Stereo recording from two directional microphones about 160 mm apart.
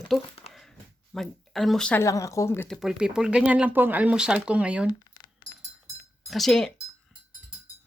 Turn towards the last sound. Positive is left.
turn(degrees=0)  # may be behind; listen again after turning